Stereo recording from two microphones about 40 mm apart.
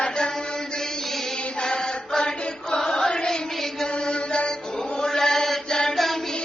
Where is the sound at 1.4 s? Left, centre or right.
Left.